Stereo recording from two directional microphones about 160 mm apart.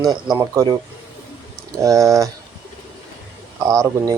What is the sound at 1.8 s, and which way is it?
Speech, 20° right (ahead or behind).